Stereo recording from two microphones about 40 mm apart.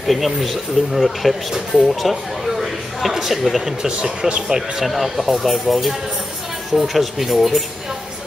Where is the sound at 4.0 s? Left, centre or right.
Right.